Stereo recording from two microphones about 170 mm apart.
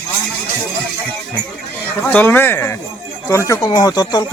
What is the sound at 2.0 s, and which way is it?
Speech, 10° left (ahead or behind).